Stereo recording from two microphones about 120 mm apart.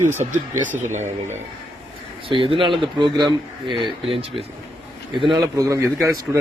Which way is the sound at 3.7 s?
50° right (ahead or behind).